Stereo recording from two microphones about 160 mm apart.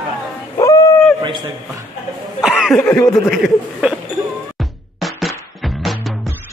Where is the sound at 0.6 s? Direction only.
20° left (ahead or behind).